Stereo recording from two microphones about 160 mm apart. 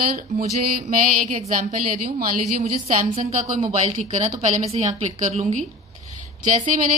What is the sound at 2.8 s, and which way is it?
A woman's voice, 50° right (ahead or behind).